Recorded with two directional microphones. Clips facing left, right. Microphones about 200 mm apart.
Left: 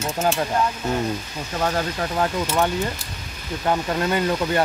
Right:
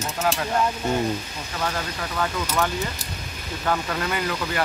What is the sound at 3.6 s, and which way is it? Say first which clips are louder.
Speech: left 3 dB; 25° left (ahead or behind).